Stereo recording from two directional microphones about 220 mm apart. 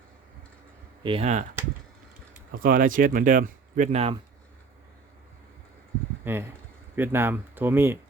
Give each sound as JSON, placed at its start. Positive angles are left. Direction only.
{"t": 1.0, "sound": "speech", "side_deg": -25}
{"t": 2.5, "sound": "speech", "side_deg": -40}
{"t": 6.2, "sound": "speech", "side_deg": -10}